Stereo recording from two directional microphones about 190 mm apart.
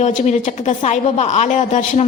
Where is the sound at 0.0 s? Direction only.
40° left (ahead or behind).